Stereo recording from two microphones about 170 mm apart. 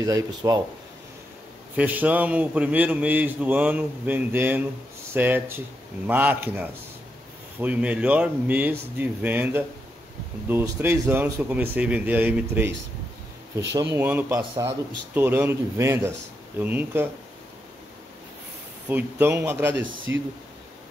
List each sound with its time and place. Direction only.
0.0 s speech: 20° right (ahead or behind)
1.8 s a man's voice: 10° right (ahead or behind)
18.9 s a man's voice: 10° right (ahead or behind)